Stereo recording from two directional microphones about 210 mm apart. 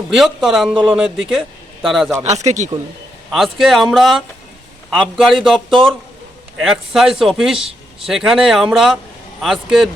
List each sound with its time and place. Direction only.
0.1 s speech: centre (ahead or behind)
2.1 s speech: 30° right (ahead or behind)
3.3 s speech: centre (ahead or behind)